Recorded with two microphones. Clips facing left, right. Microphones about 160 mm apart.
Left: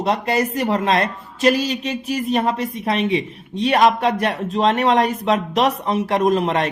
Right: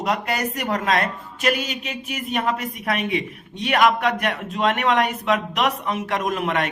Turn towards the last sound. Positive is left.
turn(degrees=30)  # may be behind; listen again after turning